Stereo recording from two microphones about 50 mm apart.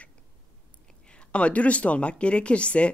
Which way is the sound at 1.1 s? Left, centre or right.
Left.